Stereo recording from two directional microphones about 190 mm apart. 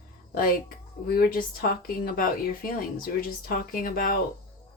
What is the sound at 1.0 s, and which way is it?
Speech, 50° left (ahead or behind).